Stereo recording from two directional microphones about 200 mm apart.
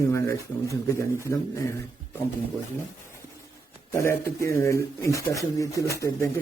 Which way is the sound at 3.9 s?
15° left (ahead or behind).